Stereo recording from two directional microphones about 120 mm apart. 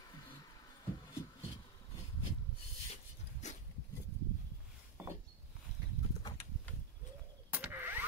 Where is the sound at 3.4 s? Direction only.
75° left (ahead or behind).